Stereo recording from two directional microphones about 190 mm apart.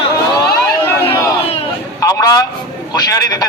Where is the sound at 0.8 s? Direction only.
10° left (ahead or behind).